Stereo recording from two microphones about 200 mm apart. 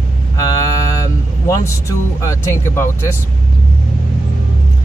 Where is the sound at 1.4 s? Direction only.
15° left (ahead or behind).